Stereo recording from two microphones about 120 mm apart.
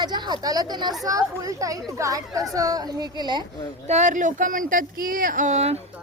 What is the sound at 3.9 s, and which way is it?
Speech, 85° right.